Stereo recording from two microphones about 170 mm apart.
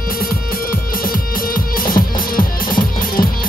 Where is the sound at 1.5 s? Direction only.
55° left (ahead or behind).